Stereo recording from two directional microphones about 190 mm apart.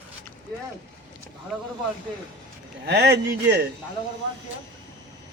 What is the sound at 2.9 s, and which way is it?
Speech, 60° right (ahead or behind).